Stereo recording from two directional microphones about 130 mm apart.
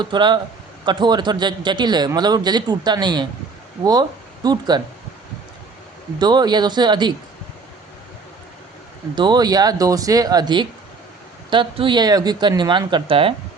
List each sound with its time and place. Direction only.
0.0 s a man's voice: 35° right (ahead or behind)
4.4 s a man's voice: 35° right (ahead or behind)
6.1 s a man's voice: 35° right (ahead or behind)
9.1 s a man's voice: 35° right (ahead or behind)